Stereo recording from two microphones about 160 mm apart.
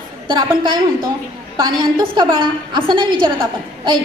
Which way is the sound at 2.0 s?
30° right (ahead or behind).